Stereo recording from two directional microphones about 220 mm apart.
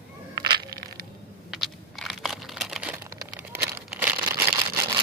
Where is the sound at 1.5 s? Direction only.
Centre (ahead or behind).